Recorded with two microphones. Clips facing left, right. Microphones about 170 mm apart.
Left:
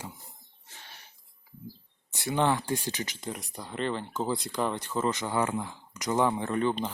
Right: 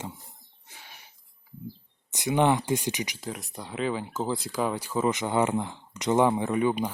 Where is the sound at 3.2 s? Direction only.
Centre (ahead or behind).